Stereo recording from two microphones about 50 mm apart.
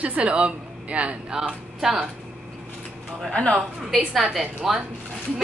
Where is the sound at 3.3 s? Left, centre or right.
Centre.